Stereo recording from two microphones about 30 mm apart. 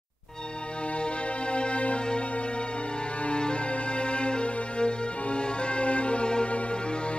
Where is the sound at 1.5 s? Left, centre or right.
Left.